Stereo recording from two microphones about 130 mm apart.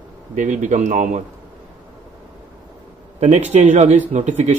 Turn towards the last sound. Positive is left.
turn(degrees=-65)  # may be behind; listen again after turning